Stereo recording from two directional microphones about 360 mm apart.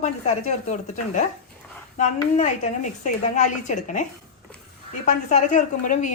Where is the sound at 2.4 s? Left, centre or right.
Centre.